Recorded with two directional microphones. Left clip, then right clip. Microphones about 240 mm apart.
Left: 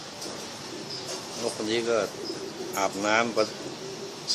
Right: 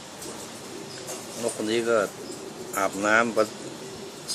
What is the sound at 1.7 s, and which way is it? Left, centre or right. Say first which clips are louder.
Speech: right 3 dB; centre.